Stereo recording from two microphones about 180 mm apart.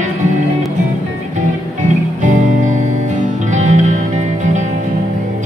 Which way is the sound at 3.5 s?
40° right (ahead or behind).